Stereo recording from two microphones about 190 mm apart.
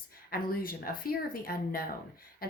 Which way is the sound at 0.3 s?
50° left (ahead or behind).